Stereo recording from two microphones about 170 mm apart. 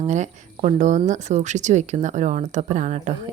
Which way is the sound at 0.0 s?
40° right (ahead or behind).